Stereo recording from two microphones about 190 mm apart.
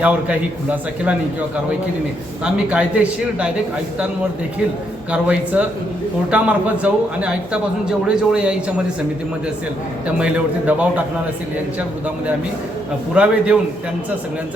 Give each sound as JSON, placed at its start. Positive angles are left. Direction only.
{"t": 0.0, "sound": "a man's voice", "side_deg": -5}
{"t": 2.4, "sound": "a man's voice", "side_deg": -5}
{"t": 5.1, "sound": "a man's voice", "side_deg": -5}
{"t": 10.2, "sound": "a man's voice", "side_deg": -5}
{"t": 13.1, "sound": "a man's voice", "side_deg": -5}